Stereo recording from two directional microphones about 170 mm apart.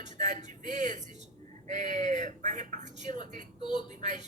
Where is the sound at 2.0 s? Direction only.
45° right (ahead or behind).